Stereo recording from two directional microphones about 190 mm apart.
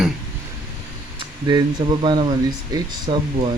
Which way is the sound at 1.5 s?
25° right (ahead or behind).